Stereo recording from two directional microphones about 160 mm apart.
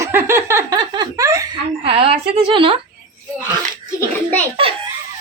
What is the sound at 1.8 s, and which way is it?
Speech, 40° right (ahead or behind).